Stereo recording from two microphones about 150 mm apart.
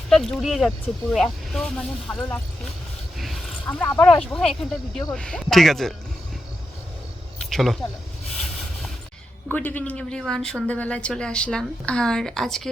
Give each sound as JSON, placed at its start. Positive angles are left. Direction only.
{"t": 0.1, "sound": "a woman's voice", "side_deg": 0}
{"t": 3.2, "sound": "a sound", "side_deg": 0}
{"t": 3.8, "sound": "a woman's voice", "side_deg": 10}
{"t": 7.5, "sound": "speech", "side_deg": 0}
{"t": 9.5, "sound": "a woman's voice", "side_deg": 10}